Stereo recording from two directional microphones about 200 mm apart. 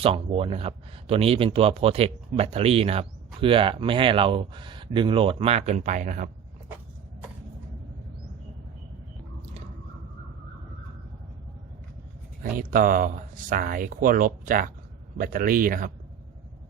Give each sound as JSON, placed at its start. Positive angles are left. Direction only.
{"t": 0.0, "sound": "speech", "side_deg": -30}
{"t": 12.4, "sound": "speech", "side_deg": -45}